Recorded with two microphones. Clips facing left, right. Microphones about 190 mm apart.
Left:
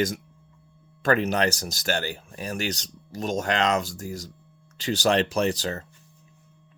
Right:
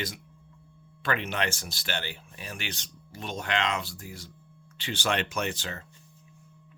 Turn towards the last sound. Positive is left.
turn(degrees=40)  # may be behind; listen again after turning